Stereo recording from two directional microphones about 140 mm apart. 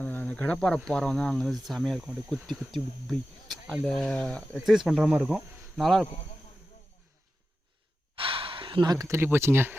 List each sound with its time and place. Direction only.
0.0 s cricket: 10° left (ahead or behind)
0.9 s speech: 5° left (ahead or behind)
8.1 s gasp: 40° right (ahead or behind); by 9.7 s 15° right (ahead or behind)